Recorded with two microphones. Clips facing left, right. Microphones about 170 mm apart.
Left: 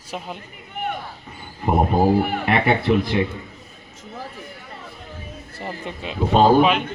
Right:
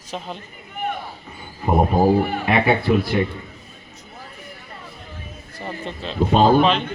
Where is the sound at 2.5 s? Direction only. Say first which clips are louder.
Right 1 dB; 5° right (ahead or behind).